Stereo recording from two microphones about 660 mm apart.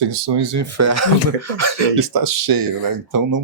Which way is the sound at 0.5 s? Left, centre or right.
Right.